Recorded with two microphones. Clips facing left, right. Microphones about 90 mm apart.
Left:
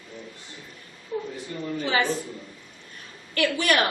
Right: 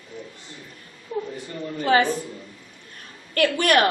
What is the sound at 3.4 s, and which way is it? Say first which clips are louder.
Speech: right 4 dB; 45° right (ahead or behind).